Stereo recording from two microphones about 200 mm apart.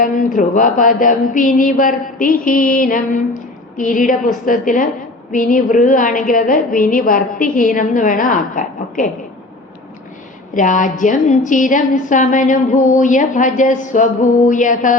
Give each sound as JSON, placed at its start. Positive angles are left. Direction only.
{"t": 0.0, "sound": "a woman's voice", "side_deg": 40}
{"t": 10.5, "sound": "a woman's voice", "side_deg": 40}